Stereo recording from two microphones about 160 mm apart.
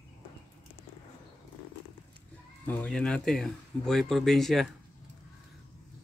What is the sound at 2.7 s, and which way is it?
Speech, 5° left (ahead or behind).